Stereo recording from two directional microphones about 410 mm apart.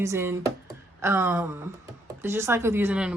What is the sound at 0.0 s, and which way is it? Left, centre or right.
Speech, centre.